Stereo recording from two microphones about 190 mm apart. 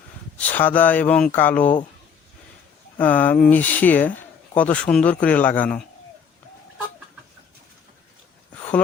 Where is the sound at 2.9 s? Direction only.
10° left (ahead or behind).